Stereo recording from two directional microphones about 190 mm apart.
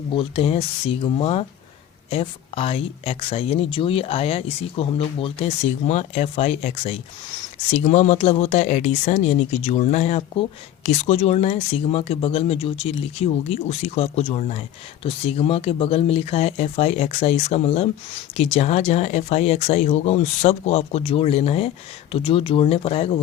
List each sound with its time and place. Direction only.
0.1 s speech: 30° left (ahead or behind)